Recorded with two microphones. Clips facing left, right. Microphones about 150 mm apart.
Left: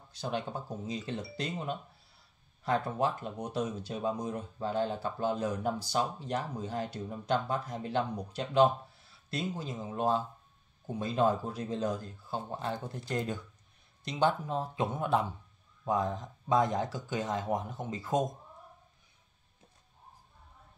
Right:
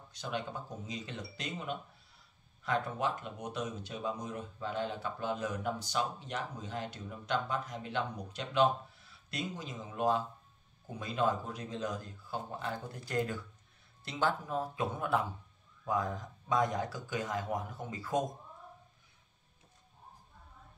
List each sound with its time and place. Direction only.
0.2 s speech: 30° left (ahead or behind)
2.6 s speech: 35° left (ahead or behind)